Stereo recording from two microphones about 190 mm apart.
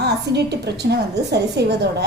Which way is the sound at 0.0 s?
60° right (ahead or behind).